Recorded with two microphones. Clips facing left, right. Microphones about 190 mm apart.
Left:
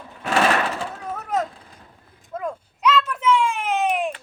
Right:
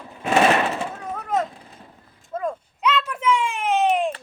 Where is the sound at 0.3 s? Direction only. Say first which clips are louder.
Right 2 dB; 20° right (ahead or behind).